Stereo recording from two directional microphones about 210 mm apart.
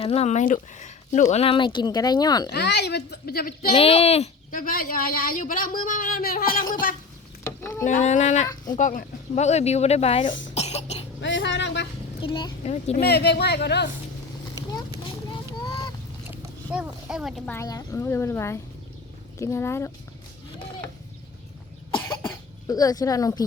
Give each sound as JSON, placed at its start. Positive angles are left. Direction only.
{"t": 0.0, "sound": "speech", "side_deg": 30}
{"t": 2.5, "sound": "a woman's voice", "side_deg": 55}
{"t": 3.7, "sound": "speech", "side_deg": 25}
{"t": 7.4, "sound": "a sound", "side_deg": 15}
{"t": 7.9, "sound": "speech", "side_deg": 35}
{"t": 8.4, "sound": "speech", "side_deg": 20}
{"t": 8.8, "sound": "speech", "side_deg": 40}
{"t": 10.5, "sound": "cough", "side_deg": 30}
{"t": 11.2, "sound": "a sound", "side_deg": 60}
{"t": 12.2, "sound": "speech", "side_deg": 20}
{"t": 13.0, "sound": "a woman's voice", "side_deg": 50}
{"t": 16.3, "sound": "a woman's voice", "side_deg": -10}
{"t": 22.6, "sound": "a woman's voice", "side_deg": 15}